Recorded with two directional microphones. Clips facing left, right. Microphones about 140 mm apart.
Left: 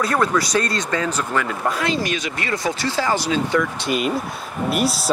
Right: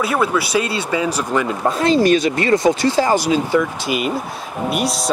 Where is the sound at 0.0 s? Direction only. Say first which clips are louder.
Right 1 dB; 5° right (ahead or behind).